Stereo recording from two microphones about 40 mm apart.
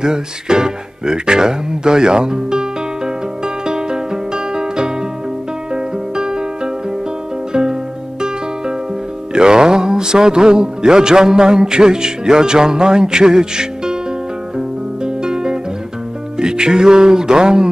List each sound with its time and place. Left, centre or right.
0.0 s speech: centre
3.4 s music: centre
9.3 s music: centre
15.0 s music: centre